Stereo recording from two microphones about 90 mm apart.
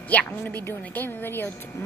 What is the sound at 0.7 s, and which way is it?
Speech, 25° left (ahead or behind).